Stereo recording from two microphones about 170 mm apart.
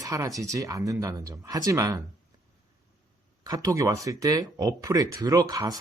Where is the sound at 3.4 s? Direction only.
20° right (ahead or behind).